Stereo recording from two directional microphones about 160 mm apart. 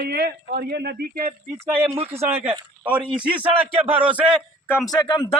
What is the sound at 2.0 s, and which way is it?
Speech, 40° right (ahead or behind).